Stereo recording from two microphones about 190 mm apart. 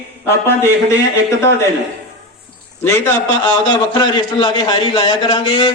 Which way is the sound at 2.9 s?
15° left (ahead or behind).